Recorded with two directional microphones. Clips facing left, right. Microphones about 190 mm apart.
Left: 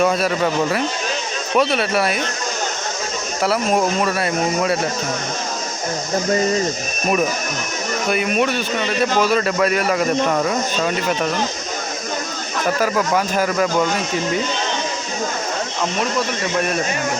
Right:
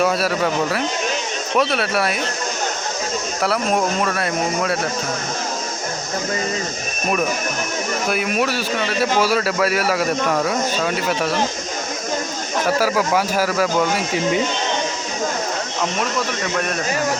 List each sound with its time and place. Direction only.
0.0 s a man's voice: 5° right (ahead or behind)
3.4 s a man's voice: centre (ahead or behind)
8.0 s a man's voice: centre (ahead or behind)
12.6 s a man's voice: 5° right (ahead or behind)